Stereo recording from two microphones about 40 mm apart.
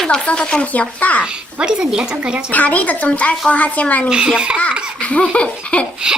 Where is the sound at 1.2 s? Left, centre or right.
Right.